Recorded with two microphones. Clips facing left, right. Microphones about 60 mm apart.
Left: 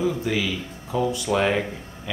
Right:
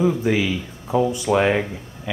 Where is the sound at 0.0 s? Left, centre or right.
Right.